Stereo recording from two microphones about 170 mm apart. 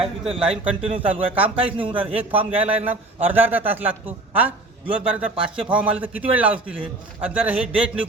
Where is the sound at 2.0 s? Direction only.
10° right (ahead or behind).